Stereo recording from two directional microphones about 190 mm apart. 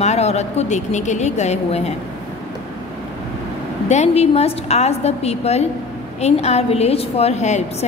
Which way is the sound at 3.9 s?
35° left (ahead or behind).